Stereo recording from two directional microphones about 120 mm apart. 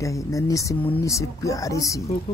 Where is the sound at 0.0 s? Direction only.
25° left (ahead or behind).